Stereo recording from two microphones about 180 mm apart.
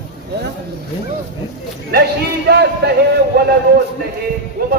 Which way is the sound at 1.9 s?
65° right (ahead or behind).